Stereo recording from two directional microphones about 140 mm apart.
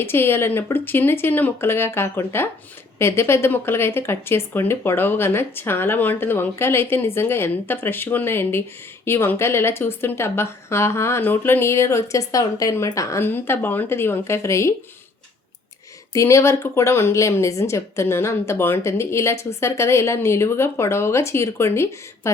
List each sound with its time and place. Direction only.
0.0 s speech: 15° left (ahead or behind)
16.1 s speech: 20° left (ahead or behind)